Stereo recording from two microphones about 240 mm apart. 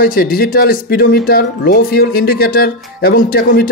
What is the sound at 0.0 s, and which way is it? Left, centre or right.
Speech, left.